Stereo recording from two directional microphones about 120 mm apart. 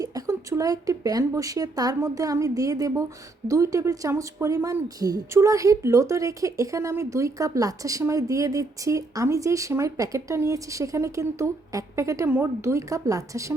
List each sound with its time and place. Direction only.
0.0 s speech: 30° right (ahead or behind)